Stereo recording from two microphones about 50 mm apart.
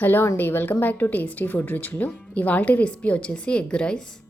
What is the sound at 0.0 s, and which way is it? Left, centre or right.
A woman's voice, left.